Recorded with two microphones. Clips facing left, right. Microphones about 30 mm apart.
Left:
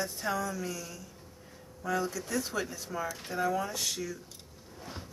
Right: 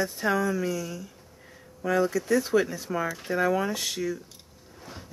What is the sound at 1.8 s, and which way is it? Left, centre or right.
Speech, centre.